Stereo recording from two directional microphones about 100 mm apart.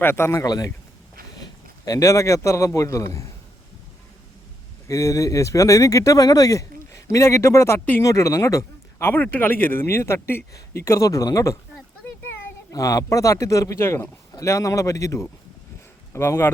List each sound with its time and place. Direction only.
0.0 s a man's voice: 25° left (ahead or behind)
4.9 s speech: 35° left (ahead or behind)
12.7 s speech: 35° left (ahead or behind)